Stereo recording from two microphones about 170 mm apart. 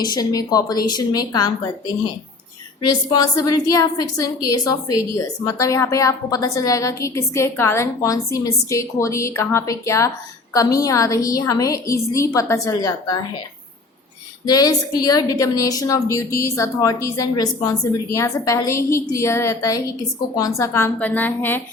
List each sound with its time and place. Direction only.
0.0 s a woman's voice: 25° left (ahead or behind)
2.8 s a woman's voice: 25° left (ahead or behind)
14.4 s a woman's voice: 20° left (ahead or behind)